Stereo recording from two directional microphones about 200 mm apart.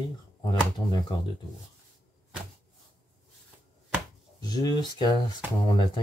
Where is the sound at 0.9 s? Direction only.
20° left (ahead or behind).